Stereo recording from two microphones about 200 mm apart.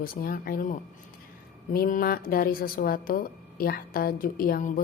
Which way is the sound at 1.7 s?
45° left (ahead or behind).